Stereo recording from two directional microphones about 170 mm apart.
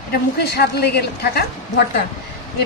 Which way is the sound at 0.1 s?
70° left (ahead or behind).